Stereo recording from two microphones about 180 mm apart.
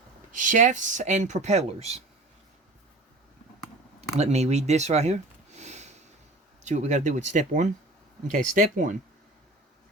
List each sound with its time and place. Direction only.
0.3 s speech: 45° right (ahead or behind)
4.2 s speech: 40° right (ahead or behind)